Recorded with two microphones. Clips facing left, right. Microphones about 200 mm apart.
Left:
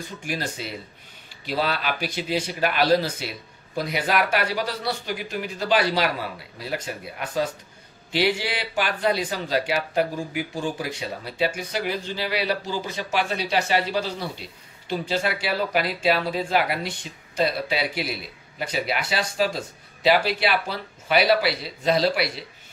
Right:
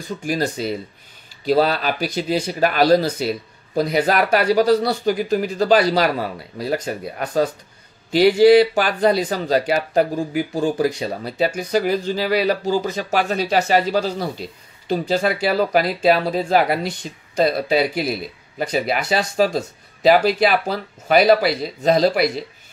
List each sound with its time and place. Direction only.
0.3 s speech: 40° right (ahead or behind)